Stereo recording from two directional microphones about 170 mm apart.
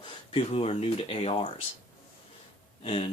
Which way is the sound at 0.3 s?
35° left (ahead or behind).